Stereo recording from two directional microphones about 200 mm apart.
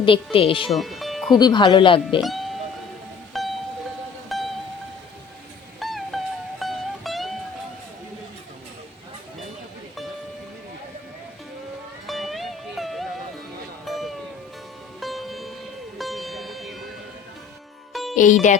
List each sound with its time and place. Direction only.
0.0 s speech: 25° left (ahead or behind)
0.7 s speech: centre (ahead or behind)
1.4 s speech: 20° left (ahead or behind)
2.2 s music: centre (ahead or behind)
5.8 s music: centre (ahead or behind)
12.0 s music: centre (ahead or behind)
17.9 s music: centre (ahead or behind)